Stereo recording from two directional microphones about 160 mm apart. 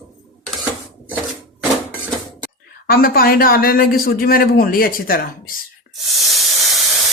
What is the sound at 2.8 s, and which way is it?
A man's voice, 70° left (ahead or behind).